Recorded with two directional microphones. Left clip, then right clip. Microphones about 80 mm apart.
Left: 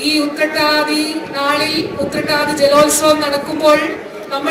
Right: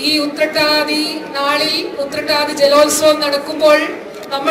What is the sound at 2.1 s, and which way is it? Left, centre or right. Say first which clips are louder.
Speech: even; right.